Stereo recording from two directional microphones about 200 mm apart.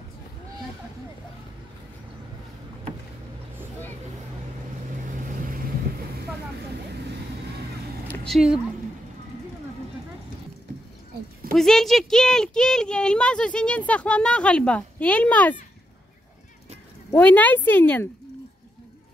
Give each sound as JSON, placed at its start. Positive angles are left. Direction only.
{"t": 8.3, "sound": "a woman's voice", "side_deg": -5}
{"t": 11.5, "sound": "speech", "side_deg": 0}
{"t": 17.1, "sound": "speech", "side_deg": 10}